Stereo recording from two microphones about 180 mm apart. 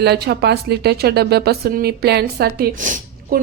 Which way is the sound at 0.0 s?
65° right (ahead or behind).